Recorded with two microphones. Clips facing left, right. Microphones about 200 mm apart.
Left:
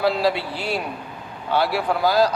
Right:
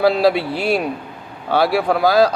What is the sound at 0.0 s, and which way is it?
Speech, 65° right (ahead or behind).